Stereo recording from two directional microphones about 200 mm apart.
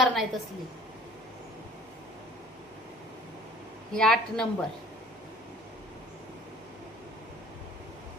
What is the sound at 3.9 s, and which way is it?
Speech, 5° left (ahead or behind).